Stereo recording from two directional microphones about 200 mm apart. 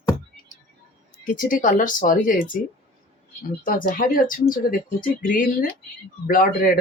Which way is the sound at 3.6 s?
45° left (ahead or behind).